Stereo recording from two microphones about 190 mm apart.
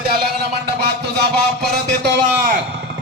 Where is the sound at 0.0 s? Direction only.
55° right (ahead or behind).